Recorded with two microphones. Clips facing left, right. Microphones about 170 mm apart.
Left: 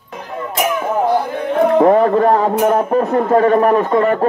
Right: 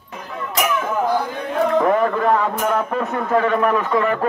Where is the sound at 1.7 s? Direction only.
35° left (ahead or behind).